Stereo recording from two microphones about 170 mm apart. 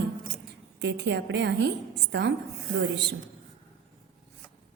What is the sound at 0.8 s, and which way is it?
Speech, 90° right.